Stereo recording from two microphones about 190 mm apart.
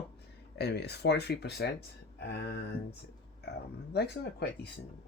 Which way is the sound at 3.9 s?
60° left (ahead or behind).